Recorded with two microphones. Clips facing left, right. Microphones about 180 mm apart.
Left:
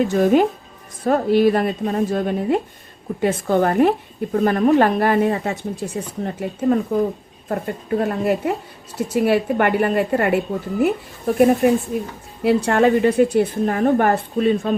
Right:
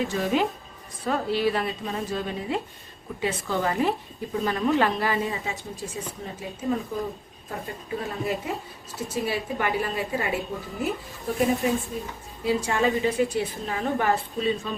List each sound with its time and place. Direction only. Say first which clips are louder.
0.0 s a woman's voice: left 9 dB; 55° left (ahead or behind)
12.4 s speech: left 8 dB; 70° left (ahead or behind)
12.9 s a woman's voice: left 8 dB; 55° left (ahead or behind)